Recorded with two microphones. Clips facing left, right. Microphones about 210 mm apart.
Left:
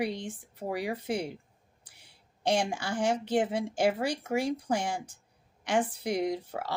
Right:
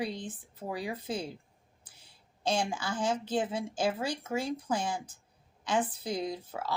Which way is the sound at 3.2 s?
70° left (ahead or behind).